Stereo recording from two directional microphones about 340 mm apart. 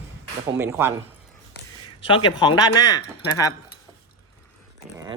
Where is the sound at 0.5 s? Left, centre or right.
Centre.